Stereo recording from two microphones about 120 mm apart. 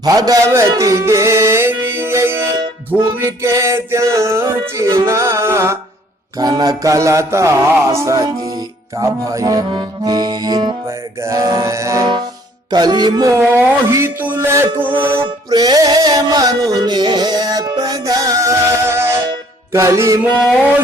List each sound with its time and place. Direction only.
0.0 s music: 30° right (ahead or behind)
6.4 s music: 35° right (ahead or behind)
9.7 s accordion: 35° right (ahead or behind)
10.8 s music: 25° right (ahead or behind)
12.7 s music: 35° right (ahead or behind); by 14.9 s 15° right (ahead or behind)
15.4 s music: 30° right (ahead or behind)